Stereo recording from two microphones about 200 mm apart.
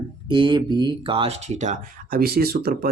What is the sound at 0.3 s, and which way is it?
Speech, 25° right (ahead or behind).